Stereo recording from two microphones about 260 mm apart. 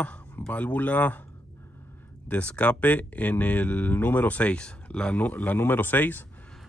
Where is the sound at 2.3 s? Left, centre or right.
Centre.